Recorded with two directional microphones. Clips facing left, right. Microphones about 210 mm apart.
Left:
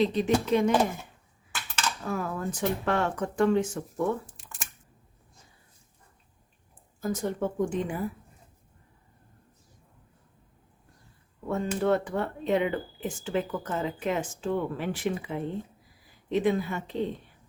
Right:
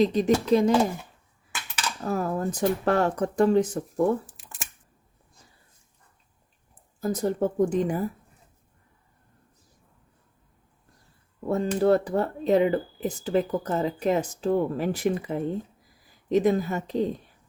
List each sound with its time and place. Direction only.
0.0 s speech: 40° right (ahead or behind)
2.0 s speech: 40° right (ahead or behind)
4.3 s camera: centre (ahead or behind)
7.0 s speech: 35° right (ahead or behind)
11.4 s speech: 35° right (ahead or behind)